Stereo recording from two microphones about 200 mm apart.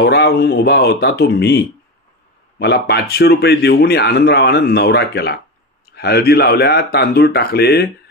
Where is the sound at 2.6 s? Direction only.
55° left (ahead or behind).